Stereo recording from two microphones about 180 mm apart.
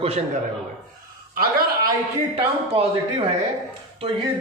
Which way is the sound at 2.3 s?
35° right (ahead or behind).